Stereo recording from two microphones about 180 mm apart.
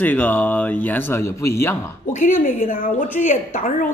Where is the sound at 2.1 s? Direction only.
45° left (ahead or behind).